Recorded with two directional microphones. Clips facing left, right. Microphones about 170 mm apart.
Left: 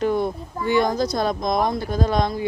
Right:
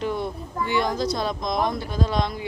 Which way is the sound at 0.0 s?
45° left (ahead or behind).